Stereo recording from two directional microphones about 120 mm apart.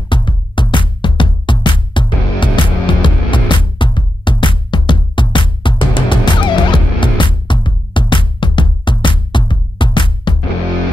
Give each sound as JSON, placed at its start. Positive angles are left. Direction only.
{"t": 0.1, "sound": "music", "side_deg": 40}